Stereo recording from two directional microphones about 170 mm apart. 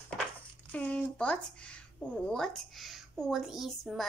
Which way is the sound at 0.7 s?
10° left (ahead or behind).